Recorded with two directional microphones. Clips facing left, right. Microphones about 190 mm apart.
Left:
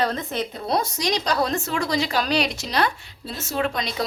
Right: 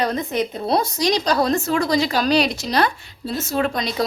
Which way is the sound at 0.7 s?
30° right (ahead or behind).